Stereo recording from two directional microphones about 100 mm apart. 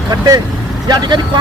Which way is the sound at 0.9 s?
50° right (ahead or behind).